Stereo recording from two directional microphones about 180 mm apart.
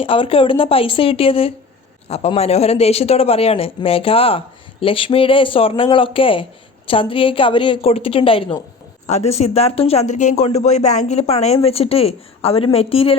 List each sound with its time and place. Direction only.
0.0 s speech: 30° left (ahead or behind)